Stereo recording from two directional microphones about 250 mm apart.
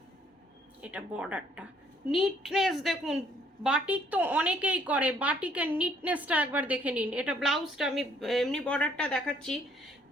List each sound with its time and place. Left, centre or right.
0.8 s a woman's voice: centre